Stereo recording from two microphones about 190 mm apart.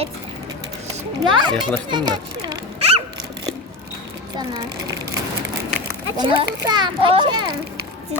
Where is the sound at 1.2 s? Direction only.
25° right (ahead or behind).